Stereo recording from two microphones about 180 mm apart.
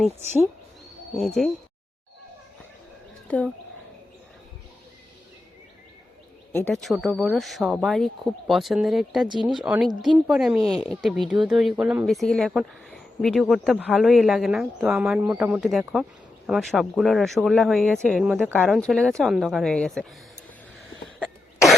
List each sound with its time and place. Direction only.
1.4 s speech: centre (ahead or behind)
3.2 s speech: 5° left (ahead or behind)
6.5 s speech: 10° left (ahead or behind)
9.4 s speech: 25° right (ahead or behind)
9.6 s speech: 5° right (ahead or behind)
21.2 s cough: centre (ahead or behind)